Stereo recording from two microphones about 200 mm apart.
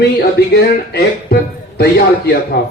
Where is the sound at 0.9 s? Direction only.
55° left (ahead or behind).